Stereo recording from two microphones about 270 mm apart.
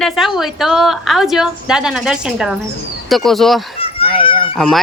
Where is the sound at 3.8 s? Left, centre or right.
Centre.